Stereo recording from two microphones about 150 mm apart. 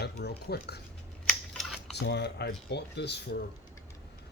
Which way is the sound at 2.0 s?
90° left.